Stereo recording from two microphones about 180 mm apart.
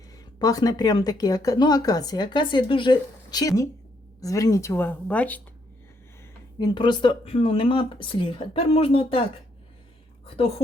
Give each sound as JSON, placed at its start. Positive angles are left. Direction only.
{"t": 0.3, "sound": "speech", "side_deg": 20}
{"t": 6.6, "sound": "speech", "side_deg": 25}
{"t": 10.2, "sound": "a woman's voice", "side_deg": 30}